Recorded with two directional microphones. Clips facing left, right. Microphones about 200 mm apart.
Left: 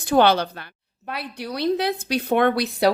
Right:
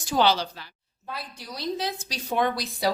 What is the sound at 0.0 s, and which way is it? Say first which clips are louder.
Speech: left 6 dB; 60° left (ahead or behind).